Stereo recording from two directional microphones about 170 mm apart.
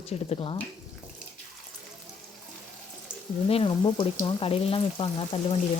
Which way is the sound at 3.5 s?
30° left (ahead or behind).